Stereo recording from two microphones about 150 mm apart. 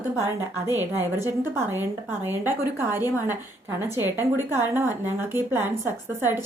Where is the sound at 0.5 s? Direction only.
15° right (ahead or behind).